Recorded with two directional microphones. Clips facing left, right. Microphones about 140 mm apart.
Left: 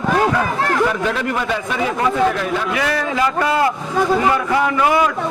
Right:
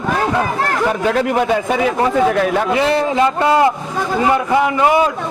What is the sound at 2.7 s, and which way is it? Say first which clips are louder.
A man's voice: right 5 dB; 25° right (ahead or behind).